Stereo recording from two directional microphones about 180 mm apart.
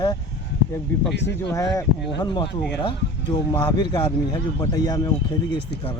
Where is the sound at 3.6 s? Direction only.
25° left (ahead or behind).